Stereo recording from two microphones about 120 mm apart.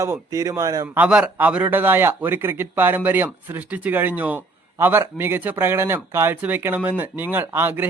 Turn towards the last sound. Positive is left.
turn(degrees=-20)  # may be behind; listen again after turning